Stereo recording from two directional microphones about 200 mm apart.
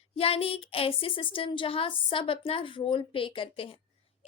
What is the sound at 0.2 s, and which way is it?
A woman's voice, 30° left (ahead or behind).